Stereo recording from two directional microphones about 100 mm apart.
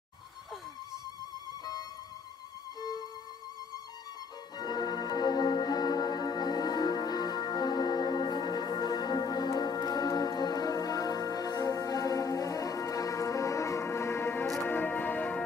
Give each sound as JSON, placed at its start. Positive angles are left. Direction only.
{"t": 1.6, "sound": "music", "side_deg": 40}
{"t": 4.6, "sound": "music", "side_deg": 40}